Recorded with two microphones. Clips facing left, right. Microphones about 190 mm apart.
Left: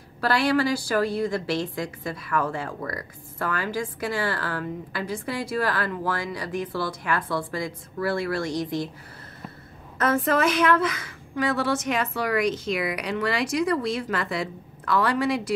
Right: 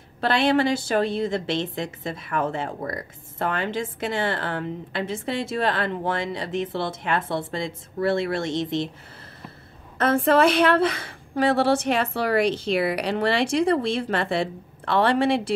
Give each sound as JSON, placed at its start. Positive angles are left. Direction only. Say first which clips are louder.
{"t": 0.2, "sound": "a woman's voice", "louder": "right 2 dB", "side_deg": -25}
{"t": 9.9, "sound": "a woman's voice", "louder": "right 4 dB", "side_deg": -30}